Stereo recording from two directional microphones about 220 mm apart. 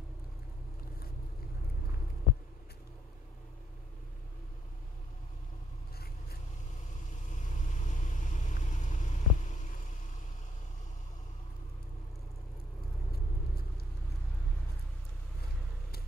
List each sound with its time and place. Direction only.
7.2 s vehicle: 35° left (ahead or behind)